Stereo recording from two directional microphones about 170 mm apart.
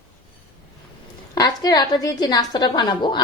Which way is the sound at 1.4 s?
20° left (ahead or behind).